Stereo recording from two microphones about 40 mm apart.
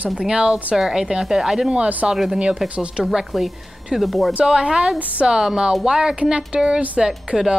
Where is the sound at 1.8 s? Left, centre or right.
Right.